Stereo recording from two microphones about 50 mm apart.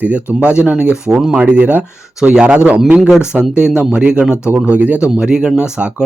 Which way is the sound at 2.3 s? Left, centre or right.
Centre.